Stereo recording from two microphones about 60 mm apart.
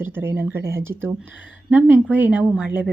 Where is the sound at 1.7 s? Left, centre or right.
Right.